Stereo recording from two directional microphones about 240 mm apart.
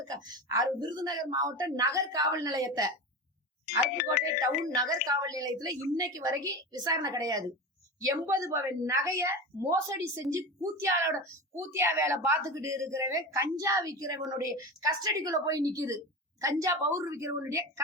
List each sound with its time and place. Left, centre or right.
0.1 s a woman's voice: centre
4.0 s speech: left
4.4 s a woman's voice: centre